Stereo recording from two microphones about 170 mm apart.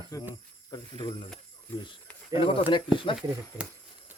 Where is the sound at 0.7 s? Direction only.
25° left (ahead or behind).